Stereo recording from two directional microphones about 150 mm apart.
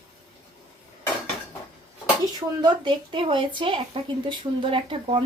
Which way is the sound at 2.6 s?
30° right (ahead or behind).